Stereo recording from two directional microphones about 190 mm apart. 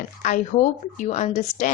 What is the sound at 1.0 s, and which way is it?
Speech, 35° left (ahead or behind).